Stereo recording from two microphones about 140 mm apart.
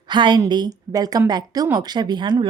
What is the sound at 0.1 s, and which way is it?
A woman's voice, 35° right (ahead or behind).